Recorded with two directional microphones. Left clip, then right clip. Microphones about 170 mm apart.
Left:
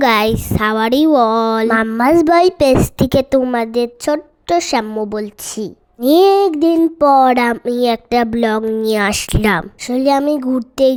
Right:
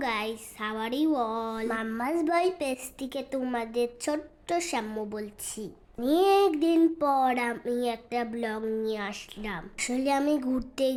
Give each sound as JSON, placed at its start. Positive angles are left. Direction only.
{"t": 0.0, "sound": "a child's voice", "side_deg": 55}
{"t": 8.8, "sound": "speech", "side_deg": 65}
{"t": 9.8, "sound": "speech", "side_deg": 40}